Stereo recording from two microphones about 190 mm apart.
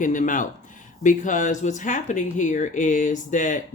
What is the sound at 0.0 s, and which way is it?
A woman's voice, 45° left (ahead or behind).